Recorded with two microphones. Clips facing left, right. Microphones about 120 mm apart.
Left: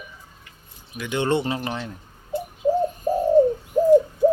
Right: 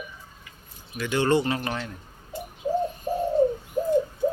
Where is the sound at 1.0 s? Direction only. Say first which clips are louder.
Even; 20° left (ahead or behind).